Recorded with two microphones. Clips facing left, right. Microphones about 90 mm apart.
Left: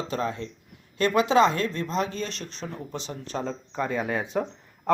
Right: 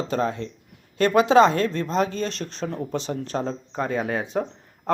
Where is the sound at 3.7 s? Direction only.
35° right (ahead or behind).